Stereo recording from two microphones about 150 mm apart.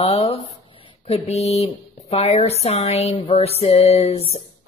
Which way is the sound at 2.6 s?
45° left (ahead or behind).